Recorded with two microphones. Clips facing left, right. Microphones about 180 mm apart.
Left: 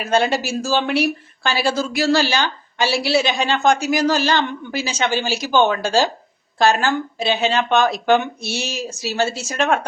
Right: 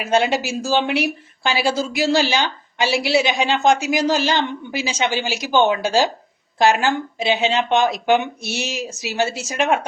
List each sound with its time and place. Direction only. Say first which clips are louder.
0.0 s speech: even; 20° right (ahead or behind)